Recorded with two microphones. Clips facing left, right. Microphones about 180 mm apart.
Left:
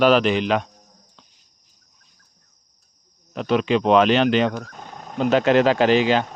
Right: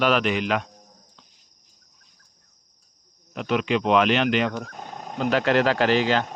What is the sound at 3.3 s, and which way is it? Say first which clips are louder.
A man's voice: left 4 dB; 35° left (ahead or behind).